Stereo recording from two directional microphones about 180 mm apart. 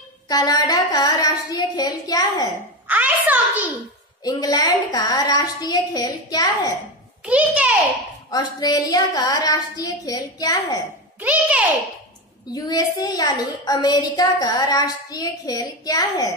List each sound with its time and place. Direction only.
0.3 s a woman's voice: 20° left (ahead or behind)
2.9 s a child's voice: 10° right (ahead or behind)
4.2 s a woman's voice: 20° left (ahead or behind)
7.2 s a child's voice: 5° right (ahead or behind)
8.3 s a woman's voice: 20° left (ahead or behind)
11.1 s a sound: 10° right (ahead or behind)
12.5 s a woman's voice: 20° left (ahead or behind)